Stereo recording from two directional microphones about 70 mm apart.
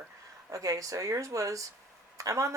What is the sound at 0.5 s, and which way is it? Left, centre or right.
Speech, right.